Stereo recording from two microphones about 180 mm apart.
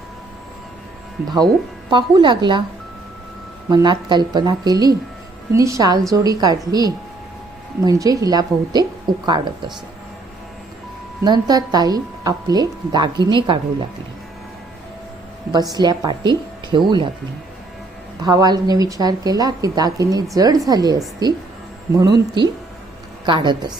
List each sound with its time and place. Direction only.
1.9 s a woman's voice: 25° right (ahead or behind)
3.7 s a woman's voice: 25° right (ahead or behind)
11.2 s a woman's voice: 20° right (ahead or behind)
15.7 s a woman's voice: 20° right (ahead or behind)
18.2 s a woman's voice: 20° right (ahead or behind)
21.9 s a woman's voice: 20° right (ahead or behind)